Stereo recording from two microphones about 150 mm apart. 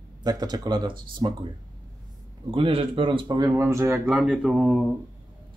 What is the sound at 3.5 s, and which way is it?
Speech, 15° right (ahead or behind).